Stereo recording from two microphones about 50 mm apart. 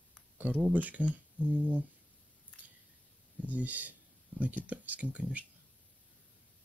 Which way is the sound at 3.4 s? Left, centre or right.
Right.